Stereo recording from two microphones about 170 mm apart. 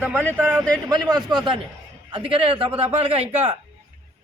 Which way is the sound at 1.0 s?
25° right (ahead or behind).